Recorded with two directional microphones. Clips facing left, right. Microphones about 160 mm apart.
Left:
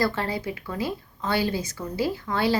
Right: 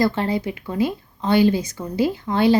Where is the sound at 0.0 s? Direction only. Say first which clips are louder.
Right 5 dB; 20° right (ahead or behind).